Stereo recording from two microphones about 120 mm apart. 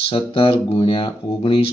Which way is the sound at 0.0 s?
50° left (ahead or behind).